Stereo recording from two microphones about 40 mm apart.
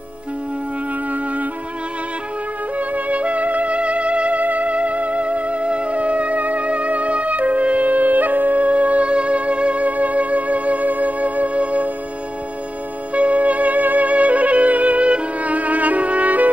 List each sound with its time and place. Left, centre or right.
1.1 s music: right
2.8 s music: right
13.1 s music: right